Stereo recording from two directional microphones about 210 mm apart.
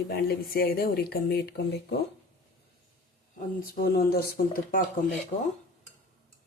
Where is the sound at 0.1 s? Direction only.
45° left (ahead or behind).